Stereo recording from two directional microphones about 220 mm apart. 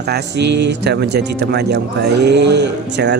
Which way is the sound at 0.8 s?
50° right (ahead or behind).